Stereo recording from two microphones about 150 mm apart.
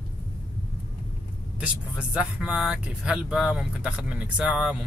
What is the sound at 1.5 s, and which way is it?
Speech, 5° right (ahead or behind).